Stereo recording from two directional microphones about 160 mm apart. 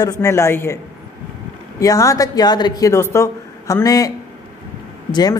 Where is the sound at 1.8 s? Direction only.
20° left (ahead or behind).